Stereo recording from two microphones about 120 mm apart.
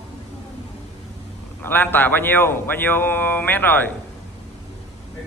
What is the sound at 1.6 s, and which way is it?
Speech, 15° left (ahead or behind).